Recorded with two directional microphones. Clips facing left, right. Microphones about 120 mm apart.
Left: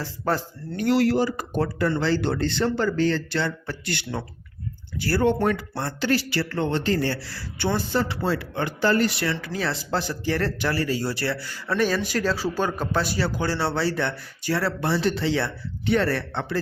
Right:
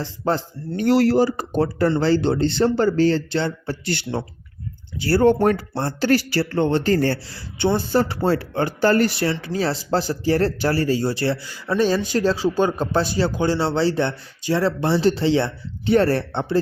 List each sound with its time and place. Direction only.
0.0 s speech: 25° right (ahead or behind)
6.1 s speech: 45° right (ahead or behind)
6.4 s speech: 30° right (ahead or behind)
7.2 s speech: 20° right (ahead or behind)
7.9 s speech: 40° right (ahead or behind)
9.3 s speech: 30° right (ahead or behind)
11.4 s speech: 15° right (ahead or behind)
16.0 s speech: 35° right (ahead or behind)